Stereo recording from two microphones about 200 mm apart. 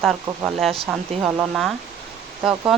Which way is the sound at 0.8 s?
10° right (ahead or behind).